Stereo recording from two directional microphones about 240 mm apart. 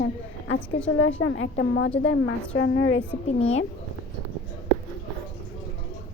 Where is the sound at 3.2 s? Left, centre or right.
Left.